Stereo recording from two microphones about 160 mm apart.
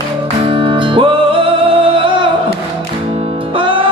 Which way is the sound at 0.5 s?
35° right (ahead or behind).